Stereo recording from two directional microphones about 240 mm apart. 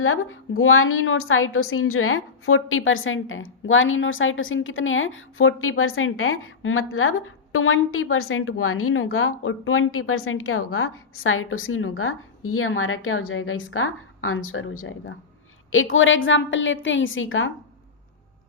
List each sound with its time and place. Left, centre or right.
0.0 s a woman's voice: left